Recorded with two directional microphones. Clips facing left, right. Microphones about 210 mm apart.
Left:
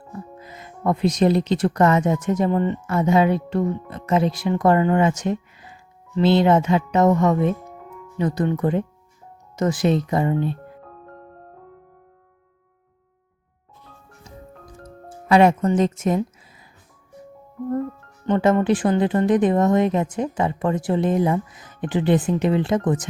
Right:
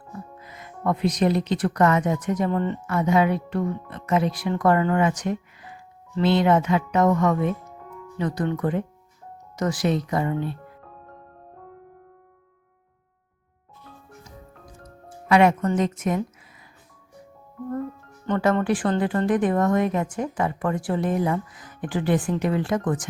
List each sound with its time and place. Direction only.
0.3 s speech: 25° left (ahead or behind)
15.3 s speech: 30° left (ahead or behind)
18.3 s speech: 20° left (ahead or behind)